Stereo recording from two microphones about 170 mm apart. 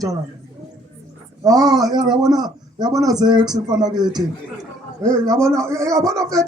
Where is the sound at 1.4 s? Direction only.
20° right (ahead or behind).